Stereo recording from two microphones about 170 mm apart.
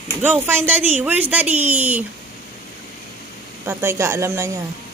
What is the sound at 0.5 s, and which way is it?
A woman's voice, 10° right (ahead or behind).